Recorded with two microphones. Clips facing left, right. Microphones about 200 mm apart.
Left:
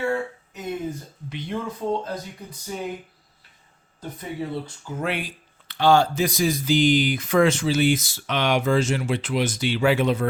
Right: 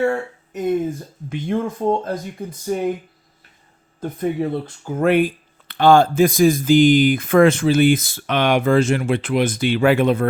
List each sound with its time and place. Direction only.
0.0 s a woman's voice: 45° right (ahead or behind)
4.0 s speech: 55° right (ahead or behind)